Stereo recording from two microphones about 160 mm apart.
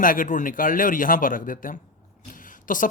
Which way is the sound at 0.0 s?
60° left (ahead or behind).